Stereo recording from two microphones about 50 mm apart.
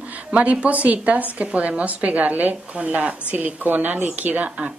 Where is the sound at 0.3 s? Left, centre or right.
Right.